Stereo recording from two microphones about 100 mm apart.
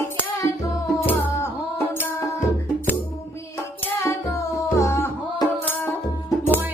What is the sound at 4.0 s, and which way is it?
Music, 25° left (ahead or behind).